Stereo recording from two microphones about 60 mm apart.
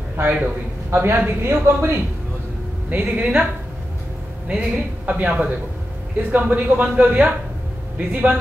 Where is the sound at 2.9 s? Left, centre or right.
Right.